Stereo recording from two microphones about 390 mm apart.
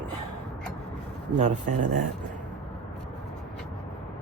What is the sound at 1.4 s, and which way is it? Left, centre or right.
Speech, centre.